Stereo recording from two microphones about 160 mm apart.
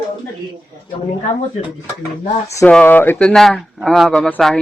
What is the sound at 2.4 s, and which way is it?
Speech, 20° left (ahead or behind).